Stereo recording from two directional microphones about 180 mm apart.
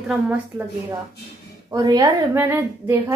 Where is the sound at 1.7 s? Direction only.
20° right (ahead or behind).